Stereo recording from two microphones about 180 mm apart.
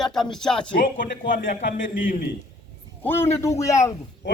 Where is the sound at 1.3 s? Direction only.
50° left (ahead or behind).